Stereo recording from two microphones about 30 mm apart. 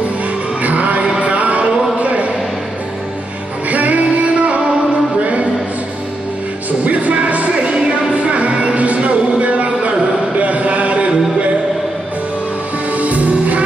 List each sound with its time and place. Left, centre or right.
0.6 s music: right
1.2 s a sound: right
3.7 s music: right
5.2 s a sound: right
6.8 s music: right
12.9 s music: right